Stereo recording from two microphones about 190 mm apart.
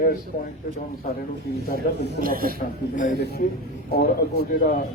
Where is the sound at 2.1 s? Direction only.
50° right (ahead or behind).